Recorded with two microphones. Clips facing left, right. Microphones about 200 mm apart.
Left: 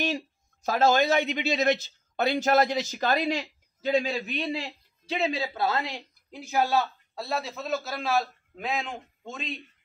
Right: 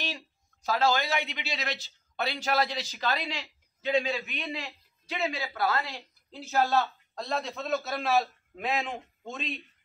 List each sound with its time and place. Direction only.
0.7 s a man's voice: 45° left (ahead or behind); by 9.6 s centre (ahead or behind)